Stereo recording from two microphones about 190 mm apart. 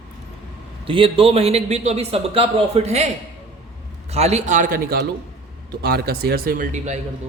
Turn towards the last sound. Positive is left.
turn(degrees=-40)  # may be behind; listen again after turning